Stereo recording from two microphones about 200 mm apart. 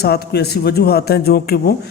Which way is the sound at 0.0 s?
50° left (ahead or behind).